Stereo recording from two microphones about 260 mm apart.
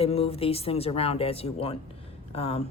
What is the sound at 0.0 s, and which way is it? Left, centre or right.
Speech, left.